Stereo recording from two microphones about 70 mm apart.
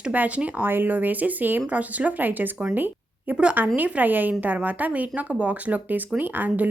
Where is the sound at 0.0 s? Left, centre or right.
Right.